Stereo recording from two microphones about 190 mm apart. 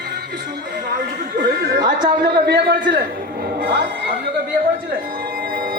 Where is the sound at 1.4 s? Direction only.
65° right (ahead or behind).